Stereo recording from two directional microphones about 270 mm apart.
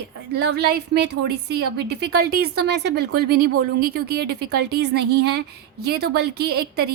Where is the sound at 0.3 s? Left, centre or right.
Right.